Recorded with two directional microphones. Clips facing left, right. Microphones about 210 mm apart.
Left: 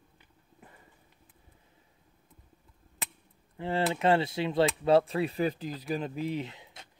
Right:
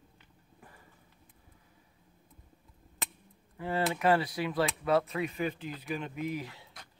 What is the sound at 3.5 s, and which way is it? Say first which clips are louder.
Speech: left 2 dB; 25° left (ahead or behind).